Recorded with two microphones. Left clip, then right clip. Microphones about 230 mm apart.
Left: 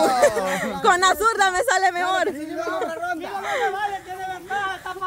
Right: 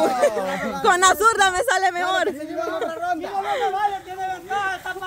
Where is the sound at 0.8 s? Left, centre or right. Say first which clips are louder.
Right 2 dB; centre.